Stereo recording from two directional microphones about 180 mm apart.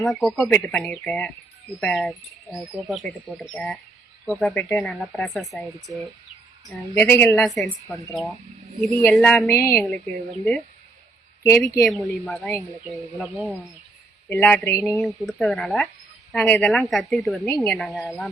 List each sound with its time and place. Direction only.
0.0 s speech: centre (ahead or behind)
8.6 s speech: 40° right (ahead or behind)
9.0 s speech: 5° left (ahead or behind)
11.4 s speech: 10° left (ahead or behind)
14.3 s speech: 10° left (ahead or behind)
14.9 s speech: centre (ahead or behind)
17.4 s speech: 15° left (ahead or behind)
17.7 s speech: centre (ahead or behind)